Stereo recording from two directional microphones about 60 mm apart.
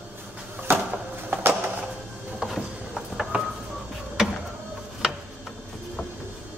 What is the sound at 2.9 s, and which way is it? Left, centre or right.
Music, centre.